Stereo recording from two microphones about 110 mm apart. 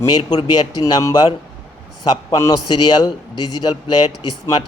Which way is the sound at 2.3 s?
35° left (ahead or behind).